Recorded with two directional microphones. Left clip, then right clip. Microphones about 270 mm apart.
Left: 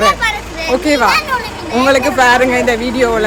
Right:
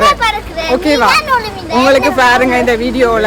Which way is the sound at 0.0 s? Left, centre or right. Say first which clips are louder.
Right 2 dB; centre.